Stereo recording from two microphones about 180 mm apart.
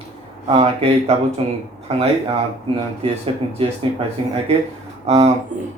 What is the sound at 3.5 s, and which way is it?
Speech, 35° right (ahead or behind).